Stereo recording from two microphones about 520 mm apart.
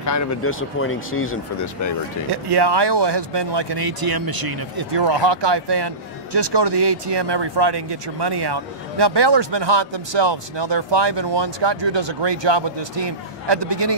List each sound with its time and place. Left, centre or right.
0.0 s speech: left
2.3 s speech: right